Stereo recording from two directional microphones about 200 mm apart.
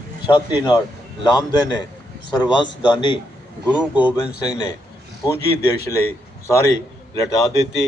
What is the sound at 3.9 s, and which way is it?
Speech, 5° right (ahead or behind).